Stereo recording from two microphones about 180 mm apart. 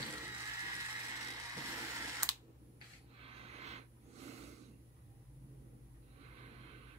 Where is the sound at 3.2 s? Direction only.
35° right (ahead or behind).